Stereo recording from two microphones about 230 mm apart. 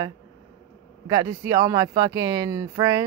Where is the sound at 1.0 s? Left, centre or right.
Centre.